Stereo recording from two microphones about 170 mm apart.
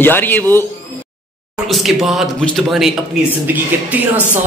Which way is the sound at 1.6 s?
Centre (ahead or behind).